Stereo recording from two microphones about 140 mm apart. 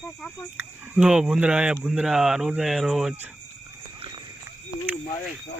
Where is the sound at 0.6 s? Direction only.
10° right (ahead or behind).